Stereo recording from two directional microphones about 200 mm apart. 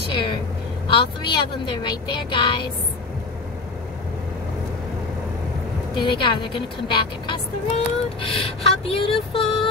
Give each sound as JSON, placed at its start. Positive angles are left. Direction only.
{"t": 0.1, "sound": "vehicle", "side_deg": 25}
{"t": 0.8, "sound": "speech", "side_deg": 25}
{"t": 5.9, "sound": "a woman's voice", "side_deg": 25}